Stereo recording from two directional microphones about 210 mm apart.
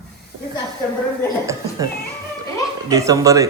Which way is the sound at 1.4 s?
15° right (ahead or behind).